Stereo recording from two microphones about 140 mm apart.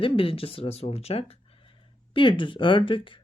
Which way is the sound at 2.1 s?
35° left (ahead or behind).